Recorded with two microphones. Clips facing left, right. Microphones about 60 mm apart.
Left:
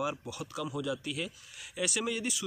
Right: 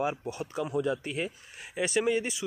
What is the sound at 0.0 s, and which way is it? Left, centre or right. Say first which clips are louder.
Speech: right 4 dB; right.